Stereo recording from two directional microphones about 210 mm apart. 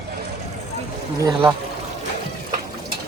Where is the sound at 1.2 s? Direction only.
15° right (ahead or behind).